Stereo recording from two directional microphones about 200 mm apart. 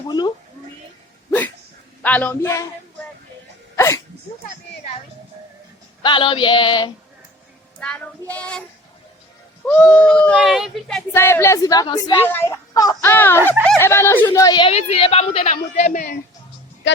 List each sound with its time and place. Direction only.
0.1 s a woman's voice: 20° left (ahead or behind)
2.0 s speech: 10° left (ahead or behind)
3.8 s dog: 15° left (ahead or behind)
6.0 s a woman's voice: 25° left (ahead or behind)
7.8 s child singing: 5° left (ahead or behind)
9.6 s a woman's voice: 5° left (ahead or behind); by 15.5 s 30° left (ahead or behind)
15.7 s a woman's voice: 40° left (ahead or behind)